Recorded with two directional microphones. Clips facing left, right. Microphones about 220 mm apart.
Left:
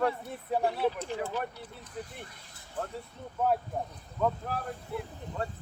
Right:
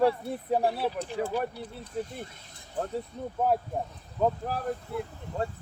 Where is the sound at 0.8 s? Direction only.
10° right (ahead or behind).